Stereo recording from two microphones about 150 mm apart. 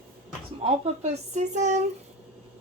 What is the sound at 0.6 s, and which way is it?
Speech, 45° right (ahead or behind).